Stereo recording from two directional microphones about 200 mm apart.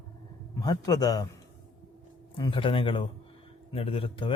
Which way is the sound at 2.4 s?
25° left (ahead or behind).